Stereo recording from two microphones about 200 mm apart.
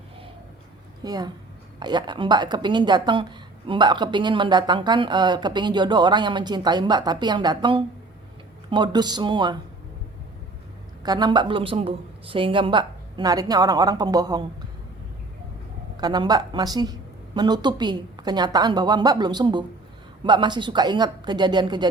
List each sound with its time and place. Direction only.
1.0 s a woman's voice: 20° right (ahead or behind)
11.0 s a woman's voice: 20° right (ahead or behind)
16.0 s a woman's voice: 20° right (ahead or behind)